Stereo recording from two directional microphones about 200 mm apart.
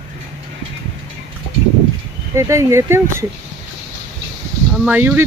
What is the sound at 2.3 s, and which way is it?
Speech, 15° right (ahead or behind).